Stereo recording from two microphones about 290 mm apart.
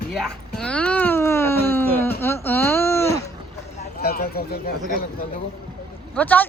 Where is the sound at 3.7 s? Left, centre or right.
Left.